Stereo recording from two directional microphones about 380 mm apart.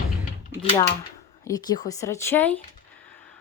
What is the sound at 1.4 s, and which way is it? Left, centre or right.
Speech, centre.